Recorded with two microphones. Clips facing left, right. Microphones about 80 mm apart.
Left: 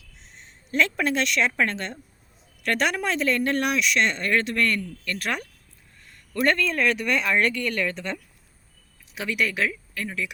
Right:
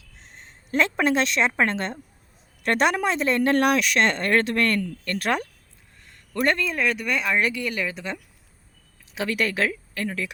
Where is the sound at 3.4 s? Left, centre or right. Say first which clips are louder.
Right 4 dB; right.